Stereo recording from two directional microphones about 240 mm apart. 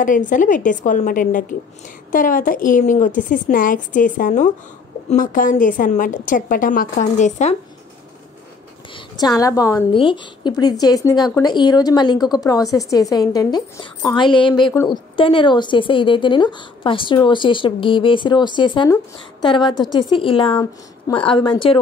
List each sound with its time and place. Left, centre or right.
0.0 s a woman's voice: left
8.9 s a woman's voice: centre